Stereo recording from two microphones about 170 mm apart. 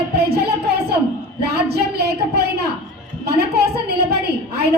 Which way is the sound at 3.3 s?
70° right (ahead or behind).